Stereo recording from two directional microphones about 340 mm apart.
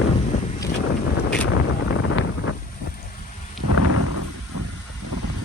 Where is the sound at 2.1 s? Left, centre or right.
Left.